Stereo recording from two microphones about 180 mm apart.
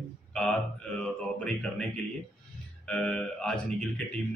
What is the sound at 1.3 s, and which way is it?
A man's voice, 5° left (ahead or behind).